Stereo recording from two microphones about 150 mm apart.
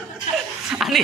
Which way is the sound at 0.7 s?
Centre (ahead or behind).